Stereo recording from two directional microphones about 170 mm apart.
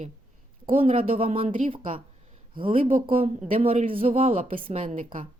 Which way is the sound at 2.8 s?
35° right (ahead or behind).